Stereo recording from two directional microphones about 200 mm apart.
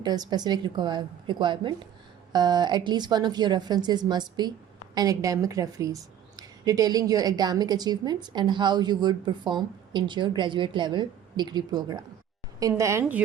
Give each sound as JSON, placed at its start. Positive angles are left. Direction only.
{"t": 0.0, "sound": "a woman's voice", "side_deg": -20}